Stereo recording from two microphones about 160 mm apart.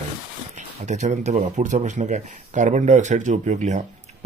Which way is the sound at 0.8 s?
50° right (ahead or behind).